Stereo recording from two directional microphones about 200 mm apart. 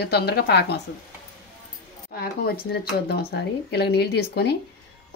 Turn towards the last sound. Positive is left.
turn(degrees=55)  # may be behind; listen again after turning